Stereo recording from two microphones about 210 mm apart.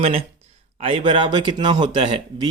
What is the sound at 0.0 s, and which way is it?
A man's voice, 30° right (ahead or behind).